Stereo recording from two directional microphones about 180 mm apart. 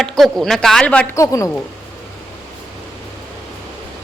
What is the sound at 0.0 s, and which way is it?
Speech, centre (ahead or behind).